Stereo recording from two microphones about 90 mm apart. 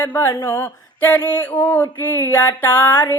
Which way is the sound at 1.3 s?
20° left (ahead or behind).